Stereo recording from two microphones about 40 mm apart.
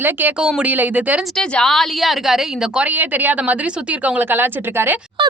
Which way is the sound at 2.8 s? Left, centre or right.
Right.